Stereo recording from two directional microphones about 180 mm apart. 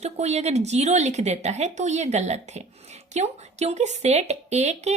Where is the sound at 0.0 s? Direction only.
35° right (ahead or behind).